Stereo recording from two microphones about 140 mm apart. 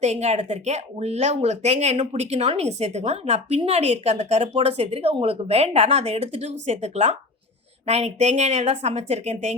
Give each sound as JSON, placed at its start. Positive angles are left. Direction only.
{"t": 0.0, "sound": "speech", "side_deg": -50}